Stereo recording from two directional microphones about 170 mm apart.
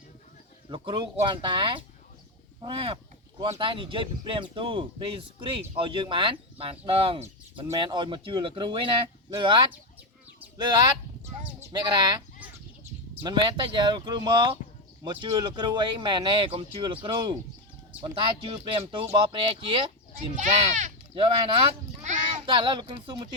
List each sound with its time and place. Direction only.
0.7 s speech: 25° right (ahead or behind)
2.6 s a sound: 30° right (ahead or behind)
3.6 s speech: 30° right (ahead or behind)
13.2 s speech: 25° right (ahead or behind)
20.3 s speech: 45° right (ahead or behind)
21.2 s speech: 30° right (ahead or behind)
22.0 s child singing: 45° right (ahead or behind)
22.4 s speech: 30° right (ahead or behind)